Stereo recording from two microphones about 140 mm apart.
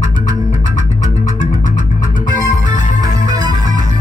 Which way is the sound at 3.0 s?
25° right (ahead or behind).